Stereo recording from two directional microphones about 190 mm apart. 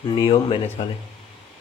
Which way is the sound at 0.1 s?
25° left (ahead or behind).